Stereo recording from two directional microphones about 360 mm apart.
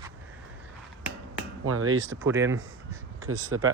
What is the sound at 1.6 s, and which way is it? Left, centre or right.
Speech, right.